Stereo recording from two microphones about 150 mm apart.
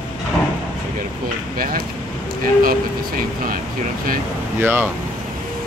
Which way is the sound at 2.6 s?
70° right (ahead or behind).